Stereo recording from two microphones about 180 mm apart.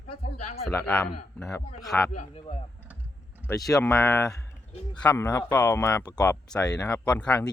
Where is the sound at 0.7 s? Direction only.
10° left (ahead or behind).